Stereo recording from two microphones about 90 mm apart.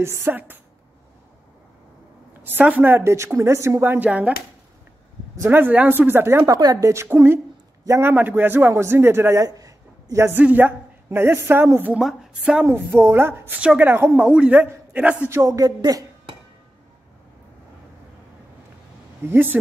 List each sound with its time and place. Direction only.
0.0 s a woman's voice: 25° right (ahead or behind)
2.6 s a woman's voice: 20° right (ahead or behind)
3.8 s speech: 20° right (ahead or behind)
5.4 s a woman's voice: 20° right (ahead or behind)
6.4 s a woman's voice: 45° right (ahead or behind)
6.9 s a woman's voice: 30° right (ahead or behind)
10.3 s a woman's voice: 20° right (ahead or behind)
12.0 s a woman's voice: 5° right (ahead or behind)
12.6 s a woman's voice: 25° right (ahead or behind)
14.2 s speech: 10° right (ahead or behind)
14.5 s a man's voice: 20° right (ahead or behind)
15.2 s speech: 35° right (ahead or behind)
19.2 s a woman's voice: 25° right (ahead or behind)